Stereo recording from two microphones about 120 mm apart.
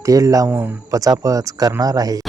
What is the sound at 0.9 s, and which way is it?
Speech, 30° right (ahead or behind).